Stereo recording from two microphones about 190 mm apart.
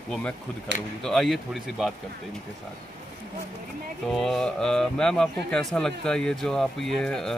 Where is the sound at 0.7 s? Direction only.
70° right (ahead or behind).